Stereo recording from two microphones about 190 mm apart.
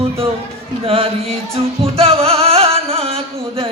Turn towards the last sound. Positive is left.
turn(degrees=-30)  # may be behind; listen again after turning